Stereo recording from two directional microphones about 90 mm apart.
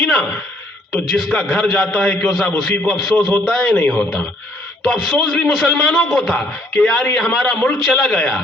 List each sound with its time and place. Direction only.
0.0 s a man's voice: 5° left (ahead or behind)
3.8 s a man's voice: 20° left (ahead or behind)
4.8 s a man's voice: 5° left (ahead or behind)